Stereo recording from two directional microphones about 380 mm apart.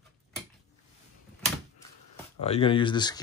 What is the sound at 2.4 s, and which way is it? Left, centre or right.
Speech, centre.